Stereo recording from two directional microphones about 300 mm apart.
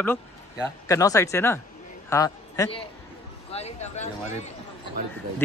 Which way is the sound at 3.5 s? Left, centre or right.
Left.